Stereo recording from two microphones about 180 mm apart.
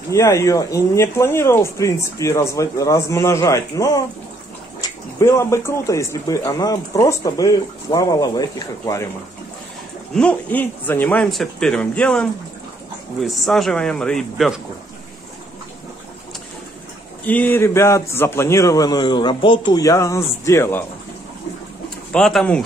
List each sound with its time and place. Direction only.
0.1 s speech: 15° left (ahead or behind)
10.1 s speech: 10° left (ahead or behind)
17.3 s speech: 10° left (ahead or behind)
22.1 s speech: 5° left (ahead or behind)